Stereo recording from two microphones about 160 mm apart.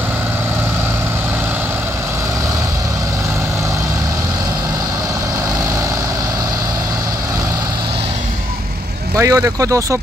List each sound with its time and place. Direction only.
9.2 s speech: 20° right (ahead or behind)